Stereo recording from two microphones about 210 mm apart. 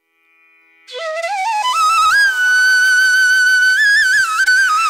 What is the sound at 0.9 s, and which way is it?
Flute, centre (ahead or behind).